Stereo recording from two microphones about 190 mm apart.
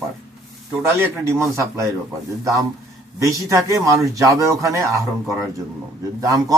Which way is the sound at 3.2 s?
15° right (ahead or behind).